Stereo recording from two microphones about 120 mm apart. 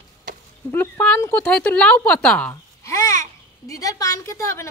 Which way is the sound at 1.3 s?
10° left (ahead or behind).